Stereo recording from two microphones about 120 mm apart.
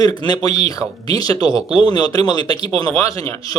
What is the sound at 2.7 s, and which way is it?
Speech, 50° right (ahead or behind).